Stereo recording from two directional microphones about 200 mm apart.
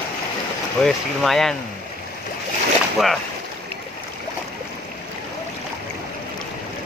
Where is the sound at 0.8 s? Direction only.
Centre (ahead or behind).